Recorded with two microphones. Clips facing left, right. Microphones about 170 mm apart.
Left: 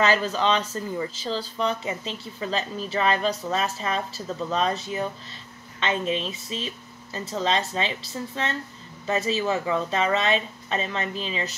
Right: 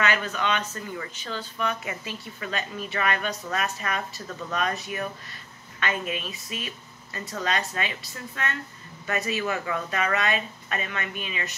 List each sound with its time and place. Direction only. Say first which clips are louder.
0.0 s speech: left 4 dB; 30° left (ahead or behind)